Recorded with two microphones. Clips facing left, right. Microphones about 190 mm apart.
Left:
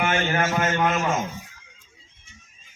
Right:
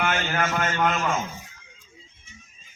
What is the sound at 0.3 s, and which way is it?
Speech, 10° left (ahead or behind).